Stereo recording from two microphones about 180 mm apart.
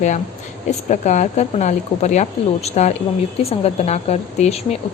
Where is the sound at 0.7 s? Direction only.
40° left (ahead or behind).